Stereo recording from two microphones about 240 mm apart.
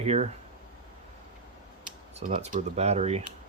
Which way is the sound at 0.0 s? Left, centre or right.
Right.